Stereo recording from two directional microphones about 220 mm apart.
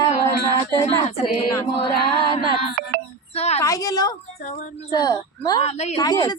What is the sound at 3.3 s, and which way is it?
Speech, 30° left (ahead or behind).